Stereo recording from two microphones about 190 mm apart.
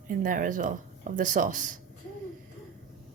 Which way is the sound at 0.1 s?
45° right (ahead or behind).